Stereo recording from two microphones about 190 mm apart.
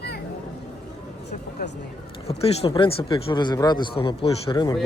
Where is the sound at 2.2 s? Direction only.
30° left (ahead or behind).